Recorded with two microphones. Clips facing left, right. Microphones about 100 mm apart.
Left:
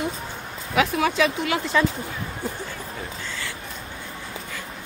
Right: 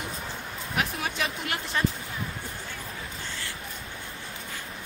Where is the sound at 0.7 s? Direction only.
90° left.